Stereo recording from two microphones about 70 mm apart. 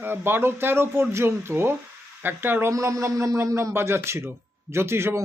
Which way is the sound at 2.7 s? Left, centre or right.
Right.